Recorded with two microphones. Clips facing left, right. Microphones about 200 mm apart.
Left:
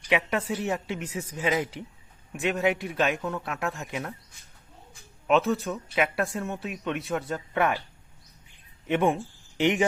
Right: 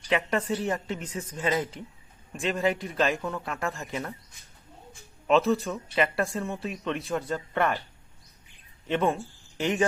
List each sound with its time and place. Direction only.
0.1 s speech: 5° left (ahead or behind)
5.3 s speech: centre (ahead or behind)
8.9 s speech: 15° left (ahead or behind)